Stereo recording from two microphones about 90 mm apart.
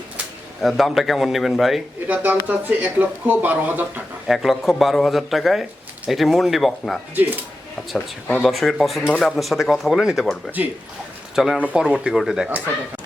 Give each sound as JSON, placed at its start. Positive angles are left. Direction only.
{"t": 0.6, "sound": "speech", "side_deg": 0}
{"t": 2.0, "sound": "speech", "side_deg": -15}
{"t": 4.3, "sound": "speech", "side_deg": 0}
{"t": 8.4, "sound": "speech", "side_deg": 0}
{"t": 11.3, "sound": "speech", "side_deg": -5}
{"t": 12.5, "sound": "speech", "side_deg": -20}